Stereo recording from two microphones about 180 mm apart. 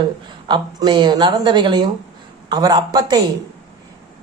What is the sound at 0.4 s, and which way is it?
A woman's voice, 25° right (ahead or behind).